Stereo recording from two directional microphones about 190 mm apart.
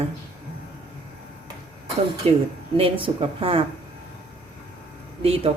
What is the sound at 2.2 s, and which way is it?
Speech, 30° right (ahead or behind).